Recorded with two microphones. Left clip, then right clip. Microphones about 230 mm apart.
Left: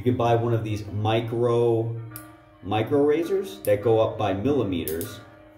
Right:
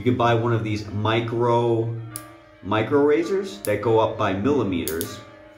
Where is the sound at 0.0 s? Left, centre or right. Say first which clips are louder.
Right 2 dB; centre.